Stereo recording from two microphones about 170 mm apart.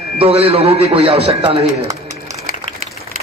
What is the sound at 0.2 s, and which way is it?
Speech, 35° right (ahead or behind).